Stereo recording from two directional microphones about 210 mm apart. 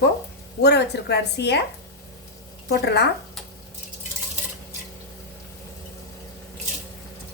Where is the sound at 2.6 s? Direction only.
50° left (ahead or behind).